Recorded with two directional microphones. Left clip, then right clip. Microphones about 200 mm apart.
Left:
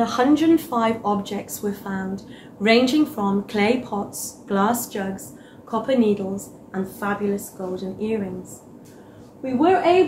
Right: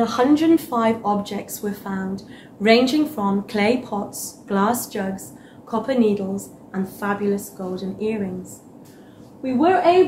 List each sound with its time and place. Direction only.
0.0 s a woman's voice: 5° right (ahead or behind)
9.4 s a woman's voice: 15° right (ahead or behind)